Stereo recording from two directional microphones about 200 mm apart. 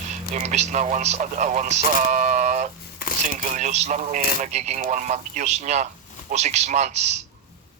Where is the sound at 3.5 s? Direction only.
35° right (ahead or behind).